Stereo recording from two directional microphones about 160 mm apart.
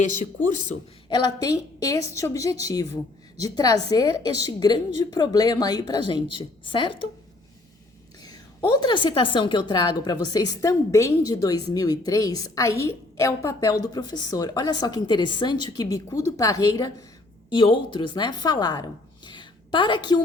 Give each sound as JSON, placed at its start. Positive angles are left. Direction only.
{"t": 0.0, "sound": "speech", "side_deg": 50}
{"t": 1.1, "sound": "a woman's voice", "side_deg": 25}
{"t": 8.2, "sound": "a woman's voice", "side_deg": 25}